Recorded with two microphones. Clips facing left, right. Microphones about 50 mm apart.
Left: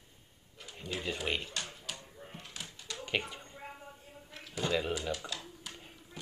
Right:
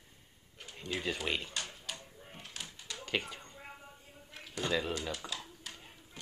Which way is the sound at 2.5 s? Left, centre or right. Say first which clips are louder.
Left 1 dB; centre.